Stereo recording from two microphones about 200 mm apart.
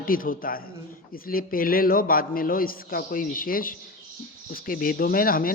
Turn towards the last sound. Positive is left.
turn(degrees=45)  # may be behind; listen again after turning